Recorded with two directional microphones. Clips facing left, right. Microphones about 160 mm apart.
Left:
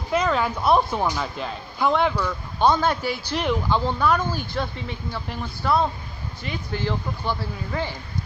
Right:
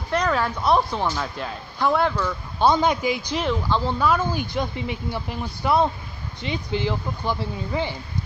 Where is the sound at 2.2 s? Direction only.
10° right (ahead or behind).